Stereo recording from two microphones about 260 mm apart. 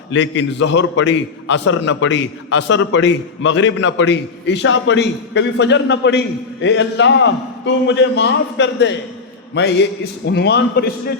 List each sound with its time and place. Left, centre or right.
0.1 s a man's voice: left